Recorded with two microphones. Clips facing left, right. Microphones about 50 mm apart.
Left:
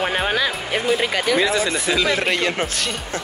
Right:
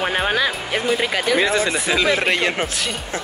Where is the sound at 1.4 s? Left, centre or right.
Right.